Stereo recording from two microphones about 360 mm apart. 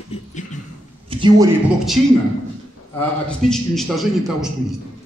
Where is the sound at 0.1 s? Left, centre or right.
Centre.